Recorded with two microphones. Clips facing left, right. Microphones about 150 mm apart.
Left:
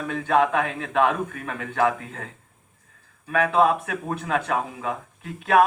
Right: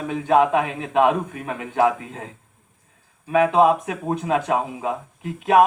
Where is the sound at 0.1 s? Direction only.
20° right (ahead or behind).